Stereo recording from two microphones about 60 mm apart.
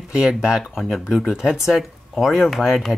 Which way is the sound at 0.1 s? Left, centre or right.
Centre.